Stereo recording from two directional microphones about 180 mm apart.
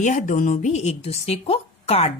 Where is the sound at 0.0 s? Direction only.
40° left (ahead or behind).